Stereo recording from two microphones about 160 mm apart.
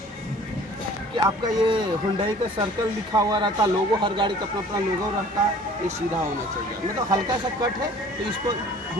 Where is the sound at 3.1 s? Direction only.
25° right (ahead or behind).